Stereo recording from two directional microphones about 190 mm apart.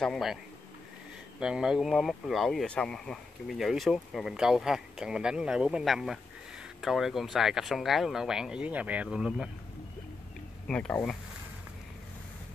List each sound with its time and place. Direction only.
0.0 s speech: centre (ahead or behind)
1.4 s speech: 5° right (ahead or behind)
10.7 s speech: 5° left (ahead or behind)